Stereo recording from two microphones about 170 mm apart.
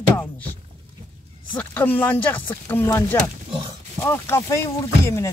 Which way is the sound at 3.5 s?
30° right (ahead or behind).